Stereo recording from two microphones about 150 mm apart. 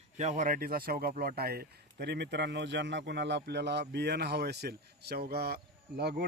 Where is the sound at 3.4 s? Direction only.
90° right.